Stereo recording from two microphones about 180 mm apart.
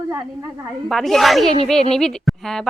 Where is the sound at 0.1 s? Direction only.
20° right (ahead or behind).